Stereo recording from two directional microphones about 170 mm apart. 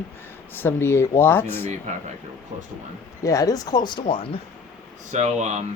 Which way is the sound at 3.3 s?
20° left (ahead or behind).